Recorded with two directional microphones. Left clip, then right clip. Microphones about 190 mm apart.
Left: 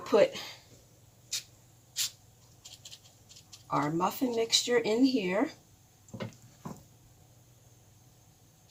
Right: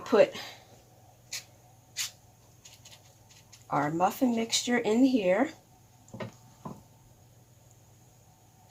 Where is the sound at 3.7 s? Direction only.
30° right (ahead or behind).